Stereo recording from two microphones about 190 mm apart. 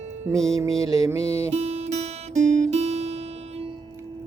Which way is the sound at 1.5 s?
35° right (ahead or behind).